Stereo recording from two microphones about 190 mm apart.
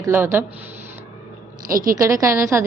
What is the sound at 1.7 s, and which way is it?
Speech, 50° right (ahead or behind).